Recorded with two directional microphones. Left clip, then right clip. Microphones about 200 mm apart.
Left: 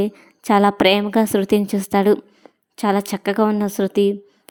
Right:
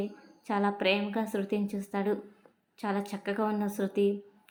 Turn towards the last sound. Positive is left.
turn(degrees=45)  # may be behind; listen again after turning